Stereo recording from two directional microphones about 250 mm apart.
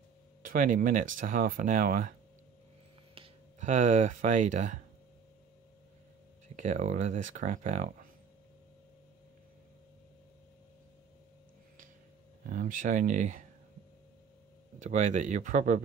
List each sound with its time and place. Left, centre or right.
0.4 s speech: right
3.2 s speech: right
6.5 s speech: right
12.4 s speech: right
14.8 s speech: right